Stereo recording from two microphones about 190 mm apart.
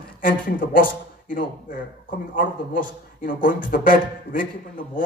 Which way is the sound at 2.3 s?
45° left (ahead or behind).